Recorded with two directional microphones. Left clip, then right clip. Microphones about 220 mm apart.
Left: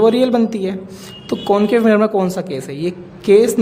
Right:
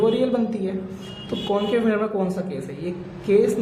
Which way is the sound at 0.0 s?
50° left (ahead or behind).